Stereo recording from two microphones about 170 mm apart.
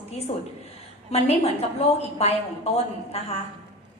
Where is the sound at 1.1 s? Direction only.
40° left (ahead or behind).